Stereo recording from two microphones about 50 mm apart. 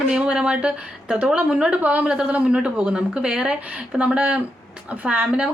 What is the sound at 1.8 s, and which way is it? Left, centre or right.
Speech, right.